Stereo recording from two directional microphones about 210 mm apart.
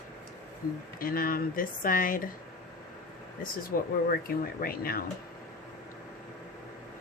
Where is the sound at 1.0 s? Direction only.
45° left (ahead or behind).